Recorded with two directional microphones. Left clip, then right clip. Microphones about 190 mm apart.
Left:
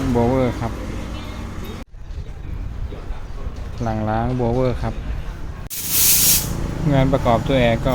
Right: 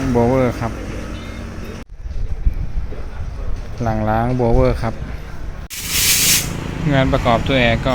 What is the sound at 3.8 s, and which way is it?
Speech, centre (ahead or behind).